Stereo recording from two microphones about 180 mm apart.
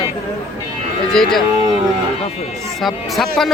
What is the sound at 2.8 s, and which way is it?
Speech, centre (ahead or behind).